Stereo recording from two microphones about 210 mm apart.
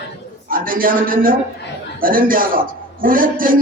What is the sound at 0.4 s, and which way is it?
A man's voice, 40° right (ahead or behind).